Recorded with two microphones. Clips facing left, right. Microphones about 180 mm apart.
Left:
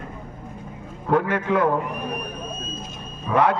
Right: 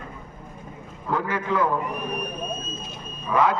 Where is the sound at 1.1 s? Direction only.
65° left (ahead or behind).